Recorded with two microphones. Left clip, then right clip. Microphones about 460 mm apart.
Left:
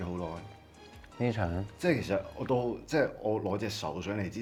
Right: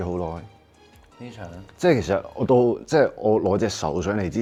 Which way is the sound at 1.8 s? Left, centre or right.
Right.